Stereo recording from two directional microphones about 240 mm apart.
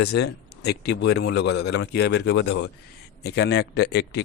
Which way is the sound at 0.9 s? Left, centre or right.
Left.